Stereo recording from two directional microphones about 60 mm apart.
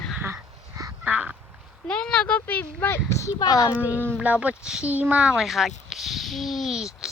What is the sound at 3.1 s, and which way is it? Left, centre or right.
Speech, left.